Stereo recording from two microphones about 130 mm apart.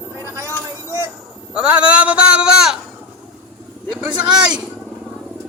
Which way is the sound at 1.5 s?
10° right (ahead or behind).